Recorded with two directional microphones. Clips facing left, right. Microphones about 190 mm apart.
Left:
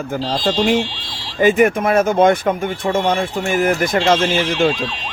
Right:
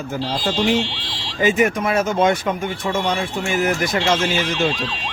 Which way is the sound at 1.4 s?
55° left (ahead or behind).